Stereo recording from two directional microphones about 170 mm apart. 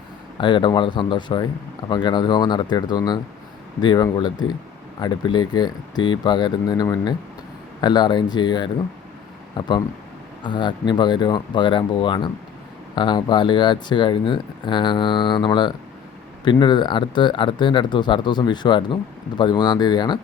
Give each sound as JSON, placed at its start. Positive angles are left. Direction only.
{"t": 0.3, "sound": "speech", "side_deg": 30}